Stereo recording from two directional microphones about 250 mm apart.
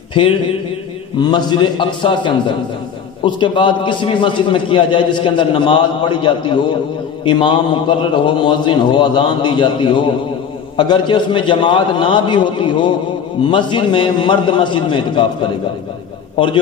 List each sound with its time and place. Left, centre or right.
1.3 s a man's voice: centre